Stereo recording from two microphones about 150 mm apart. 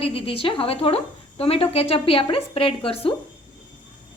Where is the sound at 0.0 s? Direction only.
40° left (ahead or behind).